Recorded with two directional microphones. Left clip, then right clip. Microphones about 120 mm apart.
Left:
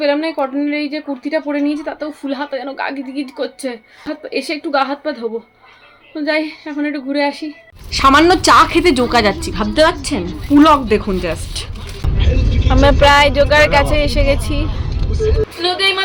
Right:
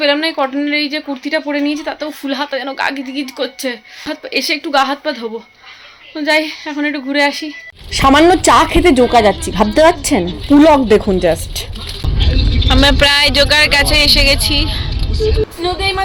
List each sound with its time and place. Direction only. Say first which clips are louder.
0.0 s a woman's voice: right 2 dB; 10° left (ahead or behind)
7.9 s a woman's voice: right 1 dB; 25° right (ahead or behind); by 9.3 s centre (ahead or behind)
9.6 s speech: right 3 dB; 40° right (ahead or behind)
12.6 s a woman's voice: even; 15° left (ahead or behind)